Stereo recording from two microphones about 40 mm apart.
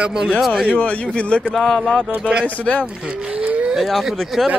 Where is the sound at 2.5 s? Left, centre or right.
Left.